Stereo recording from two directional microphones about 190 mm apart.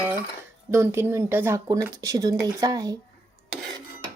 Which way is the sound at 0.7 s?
15° right (ahead or behind).